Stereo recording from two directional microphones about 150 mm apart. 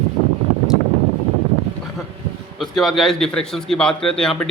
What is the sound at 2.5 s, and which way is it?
Speech, centre (ahead or behind).